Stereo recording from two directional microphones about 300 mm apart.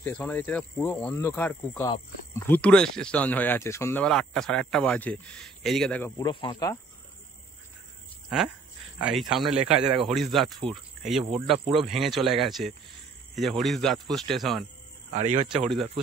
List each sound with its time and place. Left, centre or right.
0.0 s speech: centre
9.0 s speech: centre
15.1 s speech: right
15.5 s speech: centre